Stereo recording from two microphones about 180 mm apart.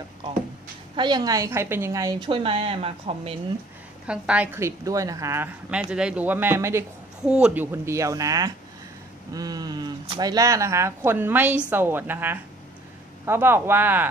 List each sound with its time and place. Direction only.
0.9 s a woman's voice: 25° right (ahead or behind)
4.1 s a woman's voice: 5° right (ahead or behind)